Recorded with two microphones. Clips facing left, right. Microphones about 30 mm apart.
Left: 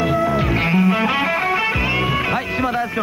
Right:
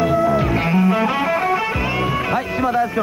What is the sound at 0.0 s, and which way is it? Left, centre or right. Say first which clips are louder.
Music: right 2 dB; centre.